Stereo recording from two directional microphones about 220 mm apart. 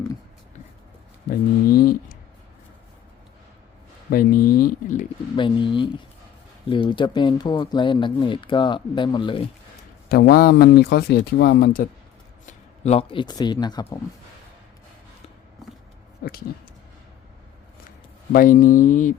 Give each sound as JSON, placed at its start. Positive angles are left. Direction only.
{"t": 1.3, "sound": "speech", "side_deg": 40}
{"t": 4.1, "sound": "speech", "side_deg": 40}
{"t": 5.4, "sound": "speech", "side_deg": 20}
{"t": 10.1, "sound": "speech", "side_deg": 45}
{"t": 12.5, "sound": "speech", "side_deg": 30}
{"t": 18.3, "sound": "speech", "side_deg": 40}